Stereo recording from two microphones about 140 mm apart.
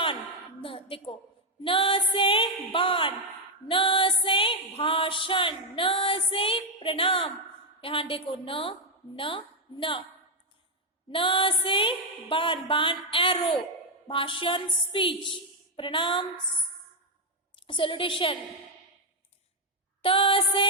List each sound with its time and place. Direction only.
0.6 s music: 40° left (ahead or behind)
1.6 s a woman's voice: 40° left (ahead or behind)
3.7 s music: 40° left (ahead or behind)
7.8 s a woman's voice: 40° left (ahead or behind)
11.1 s a woman's voice: 40° left (ahead or behind)
17.7 s a woman's voice: 35° left (ahead or behind)
20.0 s a woman's voice: 40° left (ahead or behind)